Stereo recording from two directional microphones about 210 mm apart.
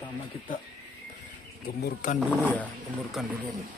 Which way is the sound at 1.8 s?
40° left (ahead or behind).